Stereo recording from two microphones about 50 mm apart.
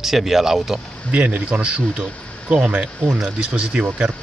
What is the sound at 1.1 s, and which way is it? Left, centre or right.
Speech, right.